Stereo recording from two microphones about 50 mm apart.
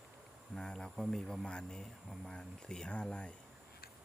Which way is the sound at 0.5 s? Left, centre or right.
Centre.